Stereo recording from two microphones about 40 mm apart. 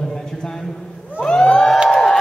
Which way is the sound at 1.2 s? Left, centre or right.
Centre.